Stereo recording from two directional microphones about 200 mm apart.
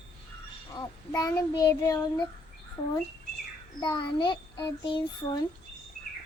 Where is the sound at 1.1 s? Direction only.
20° left (ahead or behind).